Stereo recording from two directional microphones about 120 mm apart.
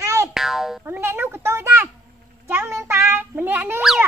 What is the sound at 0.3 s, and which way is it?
Boing, centre (ahead or behind).